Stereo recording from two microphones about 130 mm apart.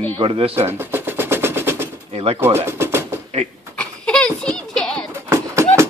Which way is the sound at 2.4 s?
20° right (ahead or behind).